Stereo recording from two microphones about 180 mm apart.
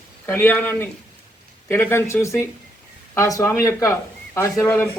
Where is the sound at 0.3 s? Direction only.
10° left (ahead or behind).